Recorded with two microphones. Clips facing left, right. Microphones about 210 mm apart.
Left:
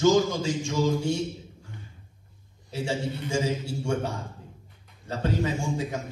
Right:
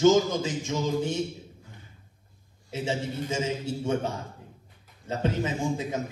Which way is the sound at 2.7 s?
20° right (ahead or behind).